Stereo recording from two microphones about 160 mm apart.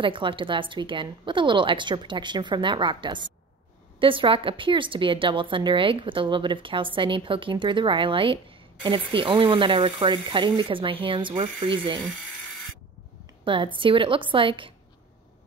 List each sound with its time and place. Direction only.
0.0 s a woman's voice: 30° right (ahead or behind)
13.4 s a sound: 30° right (ahead or behind)
13.7 s a woman's voice: 30° right (ahead or behind)